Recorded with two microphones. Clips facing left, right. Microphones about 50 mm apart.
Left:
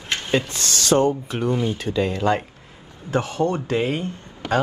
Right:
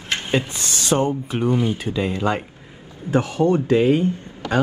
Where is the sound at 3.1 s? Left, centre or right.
Right.